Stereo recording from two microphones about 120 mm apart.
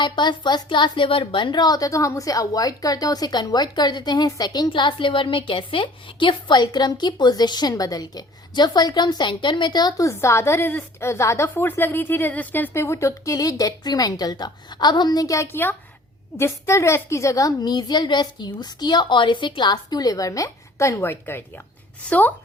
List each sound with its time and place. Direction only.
0.0 s a woman's voice: 40° left (ahead or behind); by 22.2 s 10° left (ahead or behind)